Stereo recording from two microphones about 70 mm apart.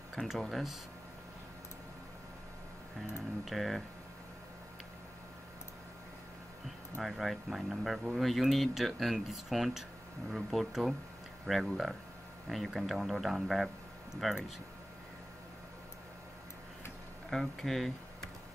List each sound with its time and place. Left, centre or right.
0.1 s speech: centre
3.4 s speech: centre
7.0 s speech: centre
17.3 s speech: centre